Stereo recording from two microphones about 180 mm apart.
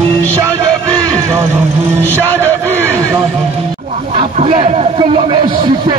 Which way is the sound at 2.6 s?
10° left (ahead or behind).